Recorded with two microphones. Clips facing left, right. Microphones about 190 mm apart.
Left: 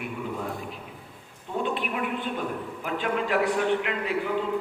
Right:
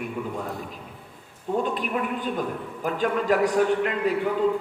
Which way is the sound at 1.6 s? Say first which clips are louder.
Left 1 dB; 40° right (ahead or behind).